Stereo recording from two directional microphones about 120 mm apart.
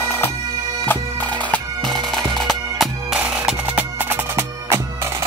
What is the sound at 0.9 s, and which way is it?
Bagpipes, 15° left (ahead or behind).